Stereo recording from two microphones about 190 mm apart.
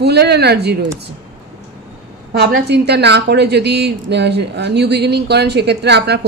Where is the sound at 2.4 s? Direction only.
60° right (ahead or behind).